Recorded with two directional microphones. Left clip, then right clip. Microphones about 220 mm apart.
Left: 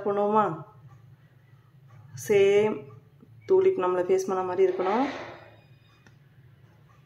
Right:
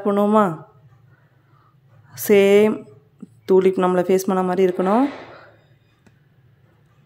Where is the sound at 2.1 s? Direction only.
50° right (ahead or behind).